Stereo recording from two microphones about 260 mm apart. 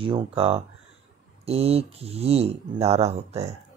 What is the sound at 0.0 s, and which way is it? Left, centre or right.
Speech, centre.